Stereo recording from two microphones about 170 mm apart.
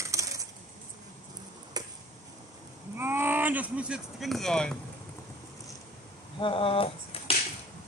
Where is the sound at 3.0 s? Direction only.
10° right (ahead or behind); by 4.7 s 5° left (ahead or behind).